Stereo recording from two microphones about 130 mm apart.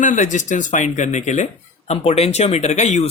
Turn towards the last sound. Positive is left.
turn(degrees=60)  # may be behind; listen again after turning